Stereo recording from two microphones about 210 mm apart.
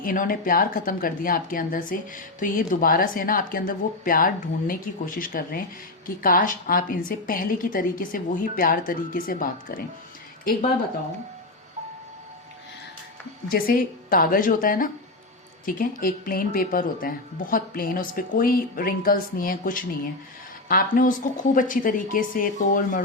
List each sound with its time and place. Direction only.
0.0 s a woman's voice: 40° left (ahead or behind)
13.5 s a woman's voice: 45° left (ahead or behind)